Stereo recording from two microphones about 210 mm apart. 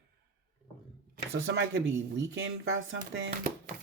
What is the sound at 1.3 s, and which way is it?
Speech, 65° right (ahead or behind).